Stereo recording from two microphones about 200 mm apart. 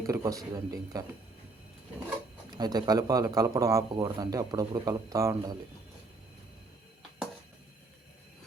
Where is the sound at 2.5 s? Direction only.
20° right (ahead or behind).